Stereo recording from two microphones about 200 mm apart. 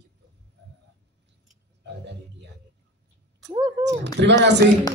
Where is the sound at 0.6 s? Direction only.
60° right (ahead or behind).